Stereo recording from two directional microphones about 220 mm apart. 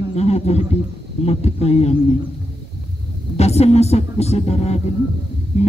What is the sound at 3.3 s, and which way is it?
Speech, 30° left (ahead or behind).